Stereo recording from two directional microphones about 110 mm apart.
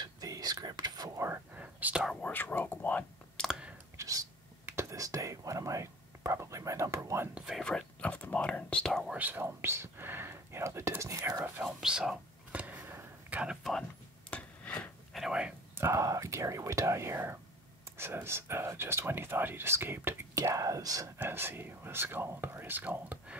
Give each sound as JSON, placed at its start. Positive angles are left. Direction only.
{"t": 0.0, "sound": "whispering", "side_deg": -35}
{"t": 1.2, "sound": "whispering", "side_deg": -20}
{"t": 2.2, "sound": "whispering", "side_deg": 15}
{"t": 3.9, "sound": "whispering", "side_deg": -30}
{"t": 7.3, "sound": "whispering", "side_deg": -5}
{"t": 7.6, "sound": "whispering", "side_deg": 10}
{"t": 8.9, "sound": "whispering", "side_deg": -5}
{"t": 9.2, "sound": "whispering", "side_deg": -20}
{"t": 11.4, "sound": "whispering", "side_deg": -10}
{"t": 12.6, "sound": "a sound", "side_deg": -20}
{"t": 14.3, "sound": "a sound", "side_deg": 10}
{"t": 15.1, "sound": "whispering", "side_deg": -5}
{"t": 15.7, "sound": "whispering", "side_deg": -25}
{"t": 21.2, "sound": "speech", "side_deg": -20}